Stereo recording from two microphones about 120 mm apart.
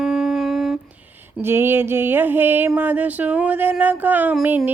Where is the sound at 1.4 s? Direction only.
20° right (ahead or behind).